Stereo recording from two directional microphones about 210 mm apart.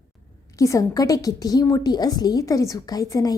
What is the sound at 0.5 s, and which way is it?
A woman's voice, 15° left (ahead or behind).